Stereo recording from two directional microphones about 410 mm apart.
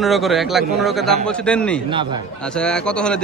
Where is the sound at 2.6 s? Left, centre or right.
Centre.